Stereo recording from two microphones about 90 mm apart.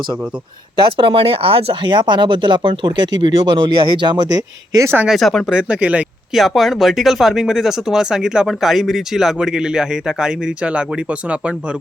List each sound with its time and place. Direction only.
0.8 s speech: 80° right; by 4.9 s 45° right (ahead or behind)
5.0 s speech: centre (ahead or behind)
5.5 s speech: 15° right (ahead or behind)
6.3 s speech: centre (ahead or behind)